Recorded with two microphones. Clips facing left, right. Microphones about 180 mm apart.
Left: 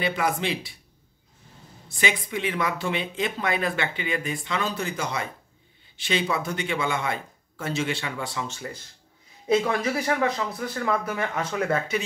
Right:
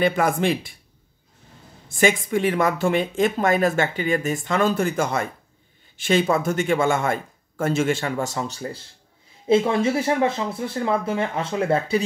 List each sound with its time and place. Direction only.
0.0 s speech: 50° right (ahead or behind)
1.9 s speech: 45° right (ahead or behind)
9.5 s speech: 25° right (ahead or behind)